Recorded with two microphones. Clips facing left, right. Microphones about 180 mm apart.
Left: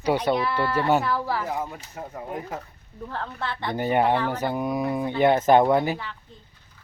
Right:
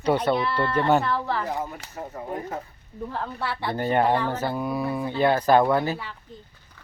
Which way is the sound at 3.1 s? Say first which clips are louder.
Right 1 dB; 10° right (ahead or behind).